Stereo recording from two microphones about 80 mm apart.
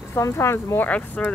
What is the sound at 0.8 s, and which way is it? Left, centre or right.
Speech, centre.